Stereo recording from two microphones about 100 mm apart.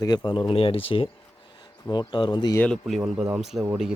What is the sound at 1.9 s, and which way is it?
Speech, 50° left (ahead or behind).